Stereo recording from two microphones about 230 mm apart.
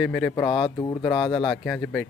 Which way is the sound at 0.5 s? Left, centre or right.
Centre.